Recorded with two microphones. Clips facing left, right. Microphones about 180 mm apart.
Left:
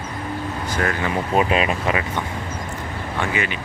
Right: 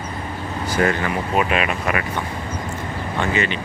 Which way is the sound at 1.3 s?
30° left (ahead or behind).